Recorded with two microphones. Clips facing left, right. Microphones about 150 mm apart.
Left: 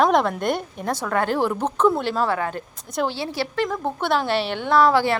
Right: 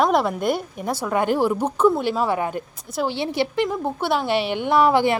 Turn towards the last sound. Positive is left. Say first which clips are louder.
# even
turn(degrees=-15)  # may be behind; listen again after turning